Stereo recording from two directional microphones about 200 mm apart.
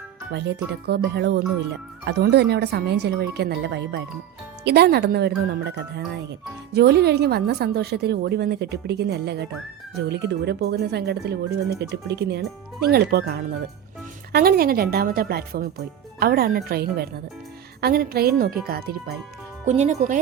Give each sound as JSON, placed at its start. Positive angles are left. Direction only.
{"t": 0.3, "sound": "a woman's voice", "side_deg": -60}
{"t": 6.7, "sound": "a woman's voice", "side_deg": -55}
{"t": 19.6, "sound": "speech", "side_deg": -35}